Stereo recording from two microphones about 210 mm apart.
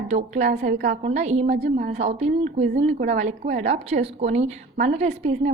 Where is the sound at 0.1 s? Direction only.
35° right (ahead or behind).